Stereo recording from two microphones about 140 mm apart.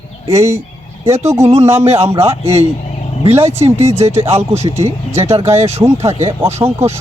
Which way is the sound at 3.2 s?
50° right (ahead or behind).